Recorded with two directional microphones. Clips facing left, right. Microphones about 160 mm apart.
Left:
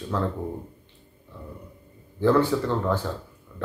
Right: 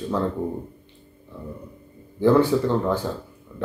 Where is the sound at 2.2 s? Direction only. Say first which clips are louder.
Right 3 dB; 15° right (ahead or behind).